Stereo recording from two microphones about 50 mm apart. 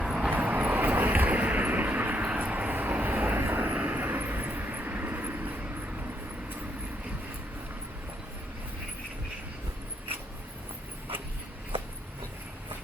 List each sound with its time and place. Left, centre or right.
0.0 s vehicle: centre
0.3 s vehicle: right